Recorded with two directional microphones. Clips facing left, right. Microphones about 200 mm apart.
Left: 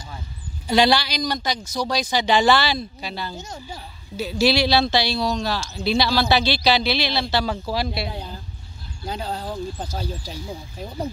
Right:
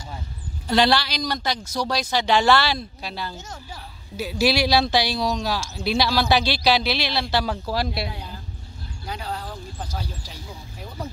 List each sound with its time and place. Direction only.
0.7 s speech: centre (ahead or behind)
3.3 s speech: 15° left (ahead or behind)
4.2 s speech: 10° right (ahead or behind)
9.0 s speech: 30° left (ahead or behind)